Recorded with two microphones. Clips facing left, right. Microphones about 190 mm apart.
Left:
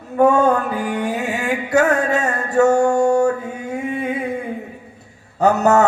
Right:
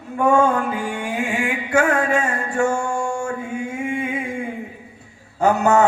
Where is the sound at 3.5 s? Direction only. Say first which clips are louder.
Even; 40° left (ahead or behind).